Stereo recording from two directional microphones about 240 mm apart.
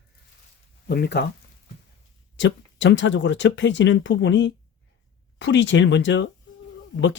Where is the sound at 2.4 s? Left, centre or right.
Left.